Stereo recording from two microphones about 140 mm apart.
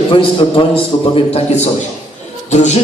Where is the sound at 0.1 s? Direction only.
40° left (ahead or behind).